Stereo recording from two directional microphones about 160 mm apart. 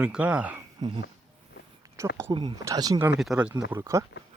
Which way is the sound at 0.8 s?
25° right (ahead or behind).